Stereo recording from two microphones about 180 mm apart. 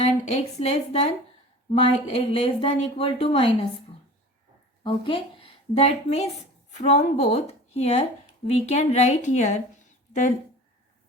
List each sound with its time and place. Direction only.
0.0 s speech: 35° left (ahead or behind)
4.8 s a woman's voice: 30° left (ahead or behind); by 10.3 s 45° left (ahead or behind)